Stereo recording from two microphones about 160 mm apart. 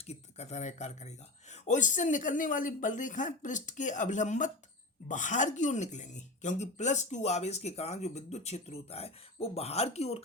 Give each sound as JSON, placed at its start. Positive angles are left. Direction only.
{"t": 0.0, "sound": "speech", "side_deg": 45}